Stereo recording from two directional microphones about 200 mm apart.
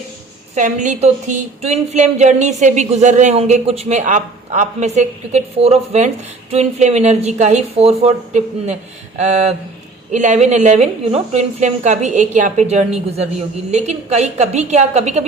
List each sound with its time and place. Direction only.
0.5 s a woman's voice: 40° right (ahead or behind)